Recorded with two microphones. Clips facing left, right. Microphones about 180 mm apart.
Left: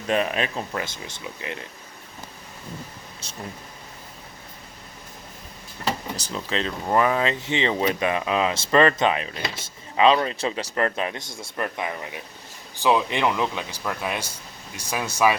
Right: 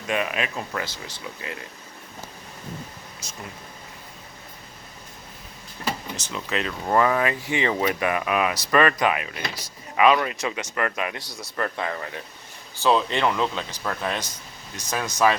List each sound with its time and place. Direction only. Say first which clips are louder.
0.1 s speech: left 3 dB; 35° left (ahead or behind)
3.2 s a sound: even; 30° left (ahead or behind)
6.1 s speech: left 1 dB; 35° left (ahead or behind)
6.9 s speech: even; 20° left (ahead or behind)